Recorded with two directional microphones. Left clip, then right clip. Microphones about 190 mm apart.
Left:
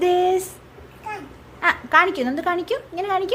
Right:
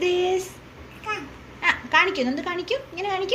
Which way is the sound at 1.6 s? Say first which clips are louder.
Left 3 dB; 30° left (ahead or behind).